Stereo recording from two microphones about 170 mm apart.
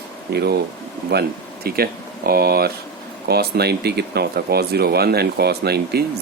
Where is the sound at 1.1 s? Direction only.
70° right (ahead or behind).